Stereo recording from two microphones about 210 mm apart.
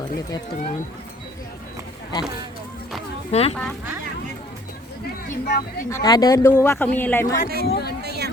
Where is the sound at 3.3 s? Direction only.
30° left (ahead or behind).